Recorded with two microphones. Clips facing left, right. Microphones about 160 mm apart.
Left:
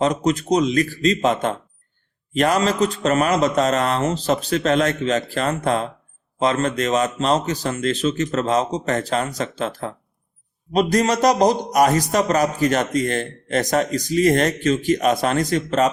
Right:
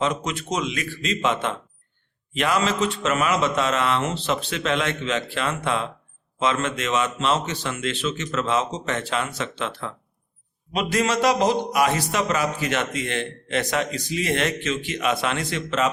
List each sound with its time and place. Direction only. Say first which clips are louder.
0.0 s a man's voice: left 6 dB; 40° left (ahead or behind)